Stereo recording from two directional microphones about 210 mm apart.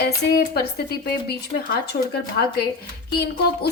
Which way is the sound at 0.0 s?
50° left (ahead or behind).